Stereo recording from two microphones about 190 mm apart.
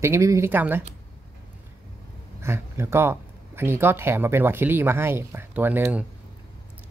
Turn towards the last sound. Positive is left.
turn(degrees=-10)  # may be behind; listen again after turning